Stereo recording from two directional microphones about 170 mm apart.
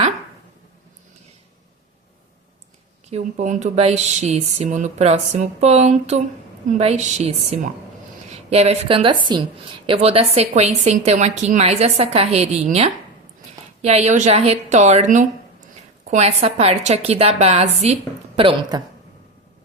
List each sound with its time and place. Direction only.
3.1 s speech: 40° right (ahead or behind)